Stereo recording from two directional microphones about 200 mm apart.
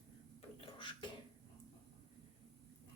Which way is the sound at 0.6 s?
25° left (ahead or behind).